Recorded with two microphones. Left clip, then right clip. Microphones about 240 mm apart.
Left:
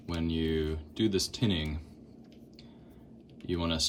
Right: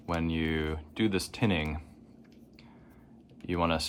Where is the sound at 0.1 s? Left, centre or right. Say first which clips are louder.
Right 2 dB; centre.